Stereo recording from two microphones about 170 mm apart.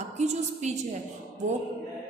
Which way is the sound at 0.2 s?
40° right (ahead or behind).